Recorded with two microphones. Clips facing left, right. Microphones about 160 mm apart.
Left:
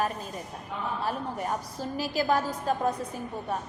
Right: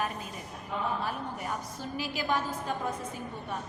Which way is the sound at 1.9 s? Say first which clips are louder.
Left 5 dB; 40° left (ahead or behind).